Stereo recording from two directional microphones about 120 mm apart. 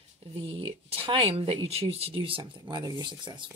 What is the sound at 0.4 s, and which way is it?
Speech, 50° right (ahead or behind).